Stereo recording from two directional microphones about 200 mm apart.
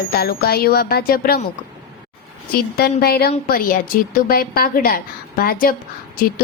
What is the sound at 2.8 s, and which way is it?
A woman's voice, 50° left (ahead or behind).